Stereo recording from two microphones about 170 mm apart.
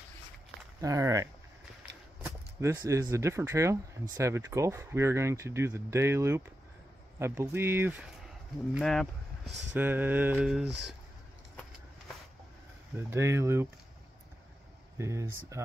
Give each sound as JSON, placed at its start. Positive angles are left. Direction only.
{"t": 0.7, "sound": "speech", "side_deg": -20}
{"t": 8.7, "sound": "speech", "side_deg": 0}
{"t": 9.8, "sound": "speech", "side_deg": -10}
{"t": 12.9, "sound": "speech", "side_deg": -15}
{"t": 15.0, "sound": "speech", "side_deg": -15}